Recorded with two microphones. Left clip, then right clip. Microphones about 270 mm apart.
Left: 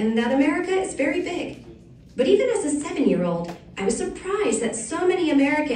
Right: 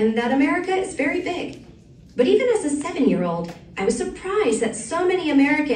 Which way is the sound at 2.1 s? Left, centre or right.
Right.